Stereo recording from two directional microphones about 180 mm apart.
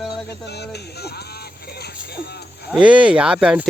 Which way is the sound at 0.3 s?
65° left (ahead or behind).